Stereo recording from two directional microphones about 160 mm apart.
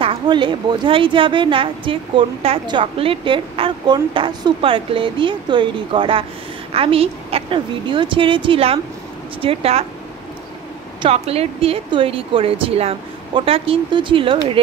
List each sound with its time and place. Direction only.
0.0 s a woman's voice: 30° right (ahead or behind)
11.0 s a woman's voice: 40° right (ahead or behind)